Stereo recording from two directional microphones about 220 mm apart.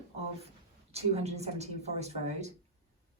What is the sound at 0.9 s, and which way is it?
A woman's voice, 30° right (ahead or behind).